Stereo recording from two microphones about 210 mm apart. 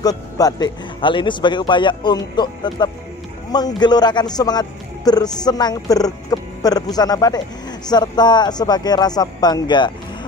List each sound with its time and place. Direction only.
0.0 s a man's voice: 15° left (ahead or behind)